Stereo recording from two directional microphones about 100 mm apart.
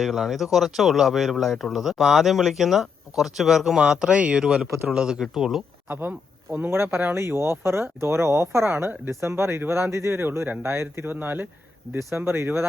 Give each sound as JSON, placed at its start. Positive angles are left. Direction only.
{"t": 0.0, "sound": "speech", "side_deg": 0}
{"t": 5.9, "sound": "speech", "side_deg": -20}